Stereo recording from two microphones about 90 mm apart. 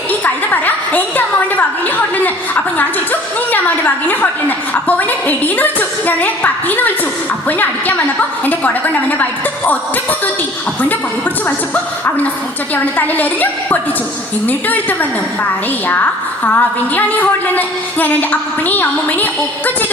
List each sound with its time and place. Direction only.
0.5 s a sound: 20° left (ahead or behind)
2.7 s a woman's voice: 20° left (ahead or behind)
11.4 s a woman's voice: 15° left (ahead or behind)
16.4 s a woman's voice: 20° left (ahead or behind)